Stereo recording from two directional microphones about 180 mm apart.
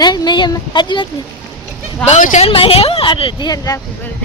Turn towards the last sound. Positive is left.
turn(degrees=20)  # may be behind; listen again after turning